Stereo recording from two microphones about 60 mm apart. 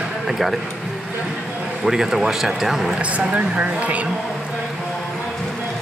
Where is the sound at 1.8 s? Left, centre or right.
Centre.